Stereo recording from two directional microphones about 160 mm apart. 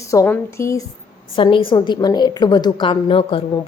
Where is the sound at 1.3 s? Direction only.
30° left (ahead or behind).